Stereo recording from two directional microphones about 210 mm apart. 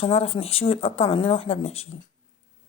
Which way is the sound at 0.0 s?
30° left (ahead or behind).